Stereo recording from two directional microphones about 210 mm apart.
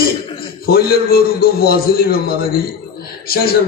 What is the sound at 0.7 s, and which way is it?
A man's voice, 45° left (ahead or behind).